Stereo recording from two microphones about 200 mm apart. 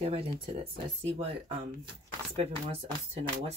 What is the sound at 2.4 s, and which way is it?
Speech, 30° right (ahead or behind).